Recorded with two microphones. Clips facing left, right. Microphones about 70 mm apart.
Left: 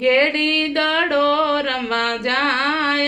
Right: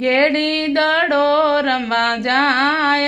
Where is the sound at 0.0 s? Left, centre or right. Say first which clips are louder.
Right 1 dB; right.